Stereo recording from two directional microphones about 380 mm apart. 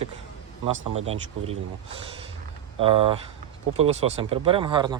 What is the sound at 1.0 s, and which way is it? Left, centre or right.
Speech, centre.